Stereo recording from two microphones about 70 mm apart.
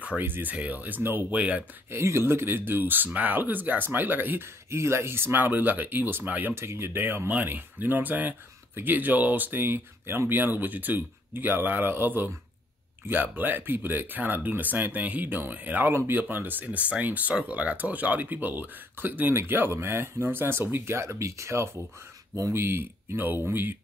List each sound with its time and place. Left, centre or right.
0.2 s speech: right
1.9 s speech: right
4.6 s speech: right
6.5 s speech: right